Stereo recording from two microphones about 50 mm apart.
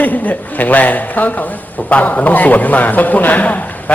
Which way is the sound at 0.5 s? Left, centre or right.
Left.